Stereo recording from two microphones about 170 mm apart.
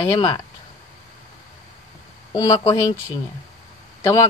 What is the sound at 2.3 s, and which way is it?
Speech, 20° left (ahead or behind).